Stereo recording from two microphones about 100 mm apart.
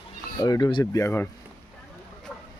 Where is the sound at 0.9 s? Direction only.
30° left (ahead or behind).